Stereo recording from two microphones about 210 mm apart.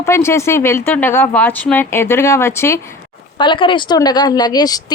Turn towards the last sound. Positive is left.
turn(degrees=20)  # may be behind; listen again after turning